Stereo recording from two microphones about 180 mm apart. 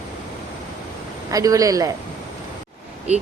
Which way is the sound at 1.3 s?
20° right (ahead or behind).